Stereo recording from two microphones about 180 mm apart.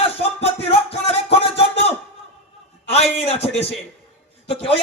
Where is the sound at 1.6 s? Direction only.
35° left (ahead or behind).